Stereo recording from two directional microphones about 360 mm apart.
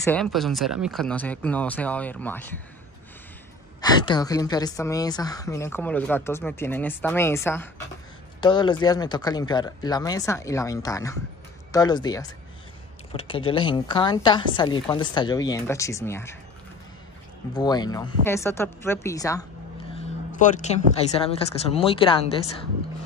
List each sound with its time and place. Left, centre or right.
0.0 s speech: centre
3.8 s a woman's voice: centre
17.6 s a woman's voice: centre
19.9 s a sound: centre
21.2 s a woman's voice: centre